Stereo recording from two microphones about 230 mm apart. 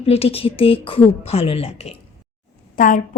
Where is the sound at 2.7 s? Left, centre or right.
Left.